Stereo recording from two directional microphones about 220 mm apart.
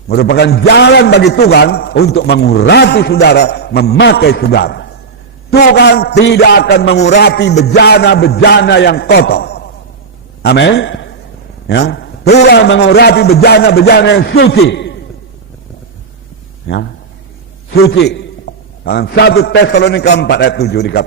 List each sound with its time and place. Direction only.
0.1 s a man's voice: 45° left (ahead or behind)
16.6 s a man's voice: 55° left (ahead or behind)
18.0 s a sound: 50° left (ahead or behind)
19.5 s a man's voice: 50° left (ahead or behind)